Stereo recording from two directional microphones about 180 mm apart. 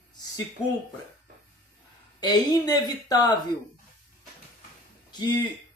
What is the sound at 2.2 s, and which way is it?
Speech, 20° left (ahead or behind).